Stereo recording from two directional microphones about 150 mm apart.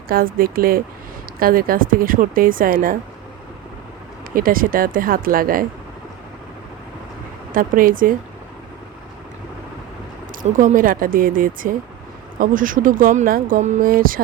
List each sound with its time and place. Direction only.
0.1 s speech: 75° right (ahead or behind)
4.4 s speech: 70° right (ahead or behind)
7.5 s speech: 70° right (ahead or behind)
10.4 s speech: 55° right (ahead or behind); by 14.2 s 70° right (ahead or behind)